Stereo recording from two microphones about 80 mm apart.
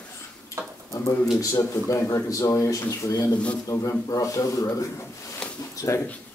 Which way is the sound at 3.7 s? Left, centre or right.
Left.